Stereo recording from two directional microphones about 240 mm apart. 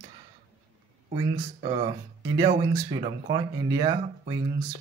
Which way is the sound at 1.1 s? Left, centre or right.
Right.